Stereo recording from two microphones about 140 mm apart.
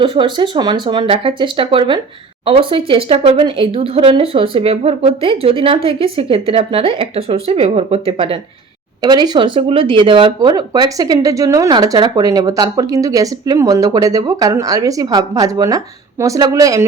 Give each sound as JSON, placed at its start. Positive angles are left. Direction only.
{"t": 0.0, "sound": "speech", "side_deg": -35}
{"t": 9.0, "sound": "speech", "side_deg": -30}